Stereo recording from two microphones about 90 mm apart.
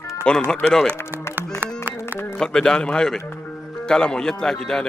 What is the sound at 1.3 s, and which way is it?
Music, 20° right (ahead or behind).